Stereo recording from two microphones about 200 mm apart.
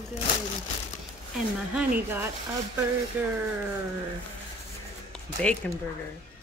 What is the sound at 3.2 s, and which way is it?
Speech, 10° right (ahead or behind).